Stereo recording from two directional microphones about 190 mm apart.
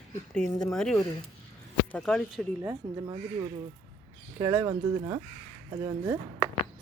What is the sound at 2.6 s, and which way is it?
Speech, 20° right (ahead or behind).